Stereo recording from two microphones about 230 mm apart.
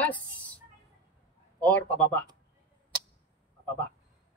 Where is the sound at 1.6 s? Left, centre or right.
Centre.